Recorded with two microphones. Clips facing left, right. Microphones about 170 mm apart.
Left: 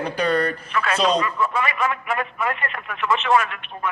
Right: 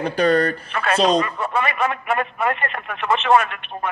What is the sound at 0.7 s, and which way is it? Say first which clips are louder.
Speech: right 1 dB; 55° right (ahead or behind).